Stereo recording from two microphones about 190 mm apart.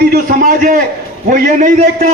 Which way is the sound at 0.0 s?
50° right (ahead or behind).